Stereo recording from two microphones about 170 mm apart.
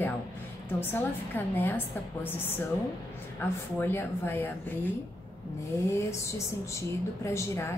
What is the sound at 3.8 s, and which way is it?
A woman's voice, 15° left (ahead or behind).